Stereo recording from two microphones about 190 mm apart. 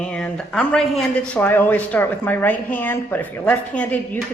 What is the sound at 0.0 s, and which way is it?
Speech, 5° left (ahead or behind).